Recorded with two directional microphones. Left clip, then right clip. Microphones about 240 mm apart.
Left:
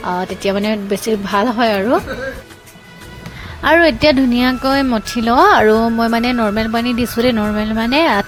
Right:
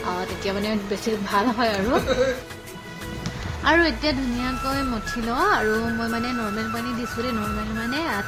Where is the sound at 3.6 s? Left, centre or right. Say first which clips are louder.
Left 9 dB; left.